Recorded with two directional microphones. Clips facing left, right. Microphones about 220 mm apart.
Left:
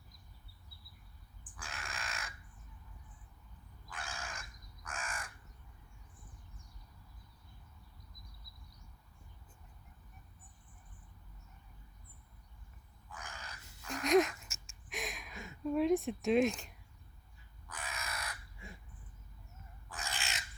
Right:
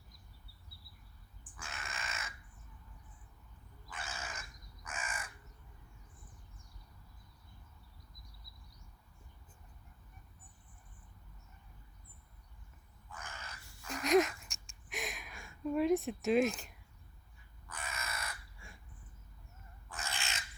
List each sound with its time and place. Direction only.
1.6 s crow: centre (ahead or behind)
3.8 s crow: centre (ahead or behind)
13.1 s crow: centre (ahead or behind)
13.4 s crow: 20° left (ahead or behind)
13.8 s a sound: centre (ahead or behind)
17.7 s crow: centre (ahead or behind)
20.1 s bird: centre (ahead or behind)